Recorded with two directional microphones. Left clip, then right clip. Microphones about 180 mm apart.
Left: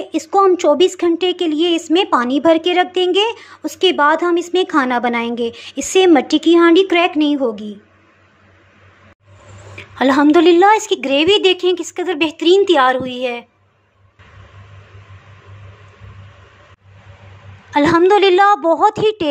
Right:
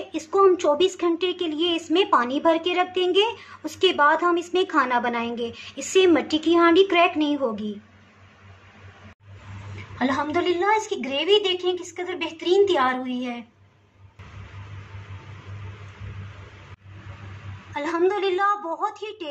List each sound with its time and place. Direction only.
0.1 s speech: 30° left (ahead or behind)
9.9 s a woman's voice: 60° left (ahead or behind)
17.7 s a woman's voice: 45° left (ahead or behind)